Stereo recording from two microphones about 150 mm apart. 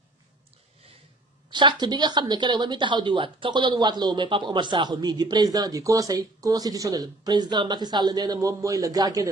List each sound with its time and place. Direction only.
1.5 s a woman's voice: 30° right (ahead or behind)